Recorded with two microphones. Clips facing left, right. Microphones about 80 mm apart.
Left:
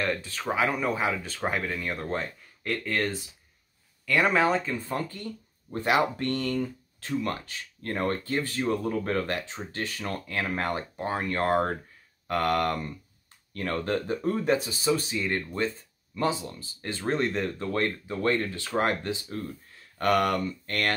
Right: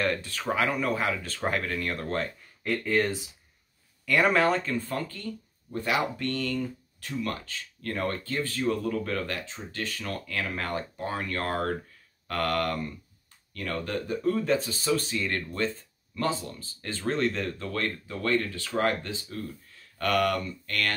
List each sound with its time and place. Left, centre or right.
0.0 s speech: centre
5.0 s speech: left
14.7 s speech: centre; by 20.9 s left